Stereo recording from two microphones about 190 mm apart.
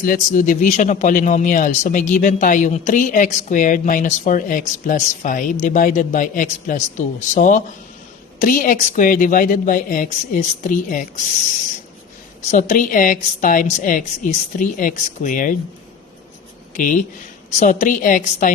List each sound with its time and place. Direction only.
0.0 s a man's voice: 45° left (ahead or behind)
12.5 s a man's voice: 40° left (ahead or behind)
16.7 s a man's voice: 45° left (ahead or behind)